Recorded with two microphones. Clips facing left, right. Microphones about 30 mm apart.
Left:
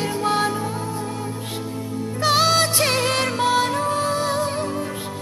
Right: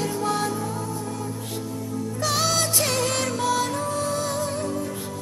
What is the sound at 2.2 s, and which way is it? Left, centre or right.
Music, left.